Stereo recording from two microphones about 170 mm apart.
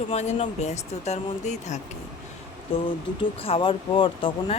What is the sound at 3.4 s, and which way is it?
Speech, 35° left (ahead or behind).